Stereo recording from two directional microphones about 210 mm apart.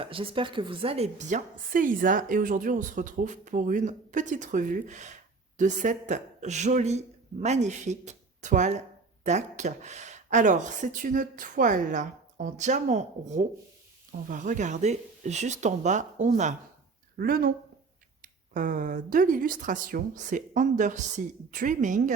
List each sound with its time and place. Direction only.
0.0 s a woman's voice: 25° right (ahead or behind)